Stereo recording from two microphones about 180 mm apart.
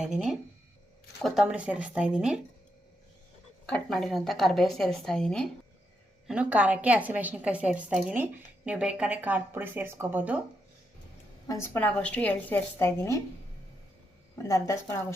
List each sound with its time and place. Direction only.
0.0 s a woman's voice: 5° right (ahead or behind)
3.7 s a woman's voice: centre (ahead or behind)
6.2 s a woman's voice: 5° right (ahead or behind)
11.4 s a woman's voice: 15° left (ahead or behind)
14.3 s a woman's voice: 15° left (ahead or behind)